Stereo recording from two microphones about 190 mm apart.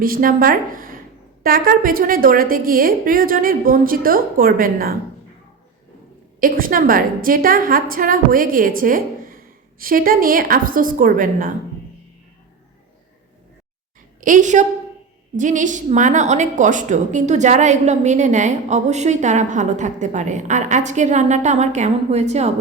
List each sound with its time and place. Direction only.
0.0 s a woman's voice: 50° right (ahead or behind)
6.4 s a woman's voice: 45° right (ahead or behind)
14.2 s a woman's voice: 45° right (ahead or behind)